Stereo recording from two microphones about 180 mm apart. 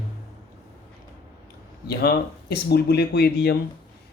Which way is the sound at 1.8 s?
60° left (ahead or behind).